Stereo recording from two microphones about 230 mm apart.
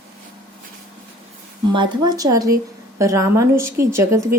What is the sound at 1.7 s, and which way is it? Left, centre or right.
A woman's voice, centre.